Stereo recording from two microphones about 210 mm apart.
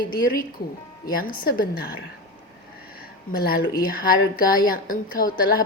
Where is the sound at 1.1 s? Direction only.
45° left (ahead or behind).